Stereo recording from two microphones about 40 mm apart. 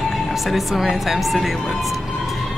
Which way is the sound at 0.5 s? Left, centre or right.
Centre.